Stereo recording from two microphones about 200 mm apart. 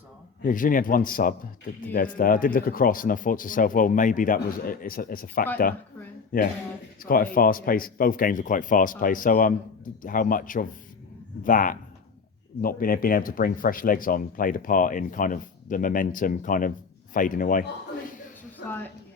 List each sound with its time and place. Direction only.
0.4 s speech: 40° left (ahead or behind)